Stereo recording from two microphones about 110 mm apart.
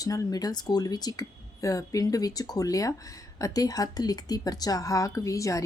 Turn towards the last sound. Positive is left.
turn(degrees=30)  # may be behind; listen again after turning